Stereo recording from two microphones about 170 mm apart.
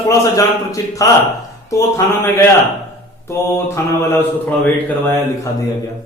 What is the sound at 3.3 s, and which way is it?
Speech, 15° left (ahead or behind).